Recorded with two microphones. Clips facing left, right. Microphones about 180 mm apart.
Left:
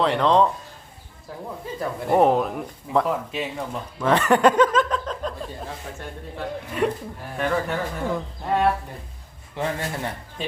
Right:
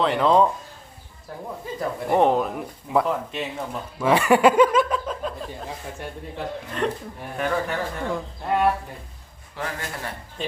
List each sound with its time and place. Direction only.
0.0 s speech: 5° right (ahead or behind)
1.8 s speech: centre (ahead or behind)
6.8 s speech: 10° left (ahead or behind)
9.6 s a man's voice: 25° left (ahead or behind)